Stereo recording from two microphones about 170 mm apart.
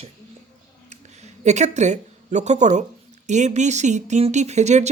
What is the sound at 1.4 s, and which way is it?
Speech, 45° right (ahead or behind).